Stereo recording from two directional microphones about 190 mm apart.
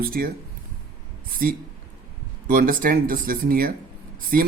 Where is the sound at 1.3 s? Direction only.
50° right (ahead or behind).